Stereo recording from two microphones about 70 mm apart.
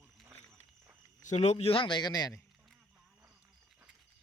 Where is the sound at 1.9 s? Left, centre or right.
Left.